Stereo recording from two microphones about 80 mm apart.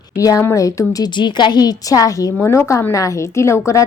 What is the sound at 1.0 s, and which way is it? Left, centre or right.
A woman's voice, left.